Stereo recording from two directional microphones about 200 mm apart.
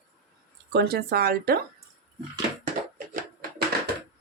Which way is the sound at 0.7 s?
55° right (ahead or behind).